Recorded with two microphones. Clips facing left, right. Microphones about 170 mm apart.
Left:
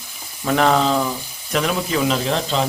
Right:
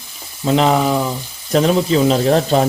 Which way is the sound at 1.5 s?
35° right (ahead or behind).